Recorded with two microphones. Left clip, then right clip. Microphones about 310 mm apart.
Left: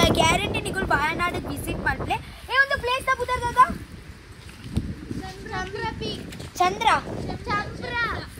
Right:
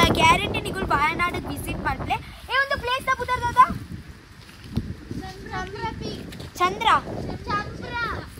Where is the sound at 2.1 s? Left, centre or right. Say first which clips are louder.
Even; right.